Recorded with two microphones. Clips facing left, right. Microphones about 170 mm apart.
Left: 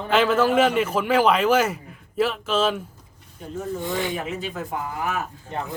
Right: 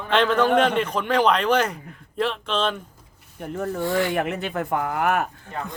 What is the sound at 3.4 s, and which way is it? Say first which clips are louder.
Speech: right 3 dB; 60° right (ahead or behind).